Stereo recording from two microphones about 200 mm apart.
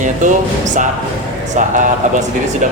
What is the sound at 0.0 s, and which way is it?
Speech, 40° right (ahead or behind).